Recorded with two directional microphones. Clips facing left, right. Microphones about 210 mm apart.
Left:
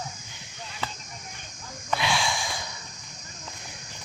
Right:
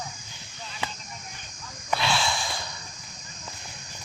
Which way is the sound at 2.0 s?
15° left (ahead or behind).